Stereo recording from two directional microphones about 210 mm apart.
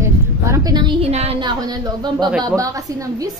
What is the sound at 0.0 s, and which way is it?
A woman's voice, 15° right (ahead or behind).